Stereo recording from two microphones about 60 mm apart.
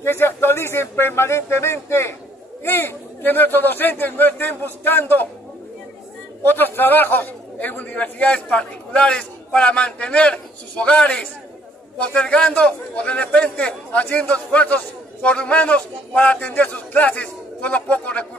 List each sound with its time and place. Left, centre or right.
0.0 s a man's voice: left
6.4 s a man's voice: left